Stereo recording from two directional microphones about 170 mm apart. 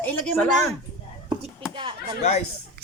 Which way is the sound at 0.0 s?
10° left (ahead or behind).